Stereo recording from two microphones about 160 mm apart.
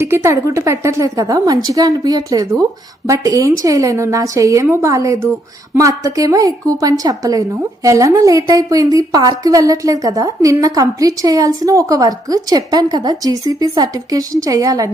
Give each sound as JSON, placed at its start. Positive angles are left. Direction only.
{"t": 0.0, "sound": "a woman's voice", "side_deg": -15}